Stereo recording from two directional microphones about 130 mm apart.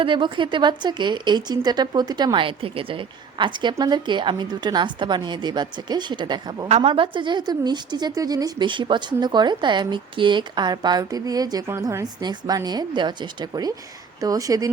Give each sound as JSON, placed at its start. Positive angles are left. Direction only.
{"t": 0.0, "sound": "speech", "side_deg": -40}
{"t": 6.7, "sound": "speech", "side_deg": -50}